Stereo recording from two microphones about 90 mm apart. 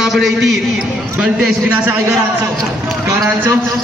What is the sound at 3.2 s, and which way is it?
Speech, 25° right (ahead or behind).